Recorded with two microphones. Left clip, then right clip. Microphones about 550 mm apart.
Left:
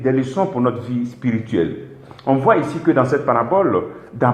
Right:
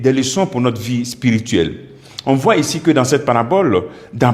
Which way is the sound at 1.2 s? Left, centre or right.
Right.